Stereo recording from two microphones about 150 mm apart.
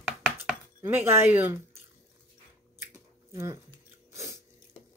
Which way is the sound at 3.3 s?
20° right (ahead or behind).